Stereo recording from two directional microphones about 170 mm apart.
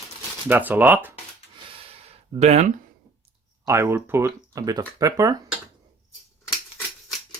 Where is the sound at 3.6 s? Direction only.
15° right (ahead or behind).